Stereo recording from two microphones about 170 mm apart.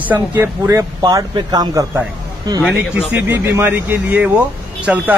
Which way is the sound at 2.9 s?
10° right (ahead or behind).